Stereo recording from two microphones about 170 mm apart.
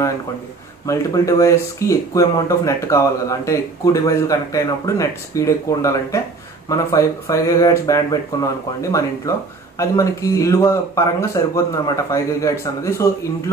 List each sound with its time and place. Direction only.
0.8 s speech: 20° left (ahead or behind)